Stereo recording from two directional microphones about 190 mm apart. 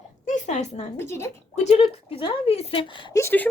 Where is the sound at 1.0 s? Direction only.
15° left (ahead or behind).